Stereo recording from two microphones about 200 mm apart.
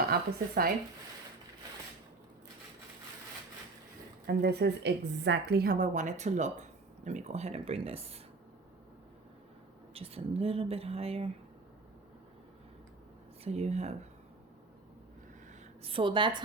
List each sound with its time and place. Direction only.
0.1 s speech: 50° right (ahead or behind)
4.3 s a woman's voice: 55° right (ahead or behind); by 8.2 s 30° right (ahead or behind)
9.9 s speech: 30° right (ahead or behind)
13.4 s a woman's voice: 30° right (ahead or behind)
15.8 s speech: 25° right (ahead or behind)